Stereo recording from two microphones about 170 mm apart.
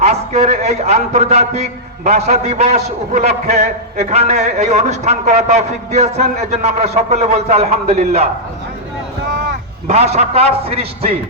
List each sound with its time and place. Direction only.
0.0 s a man's voice: 40° right (ahead or behind)
9.8 s a man's voice: 40° right (ahead or behind)